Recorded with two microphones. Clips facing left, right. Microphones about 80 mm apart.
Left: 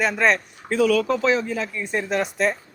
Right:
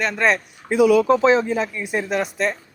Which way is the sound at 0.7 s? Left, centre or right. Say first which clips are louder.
Right 5 dB; centre.